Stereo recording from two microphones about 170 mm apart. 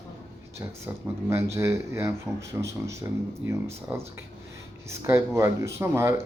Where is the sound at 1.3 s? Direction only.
15° right (ahead or behind).